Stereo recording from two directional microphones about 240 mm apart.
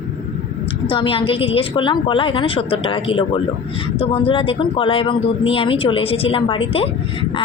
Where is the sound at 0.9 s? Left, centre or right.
Left.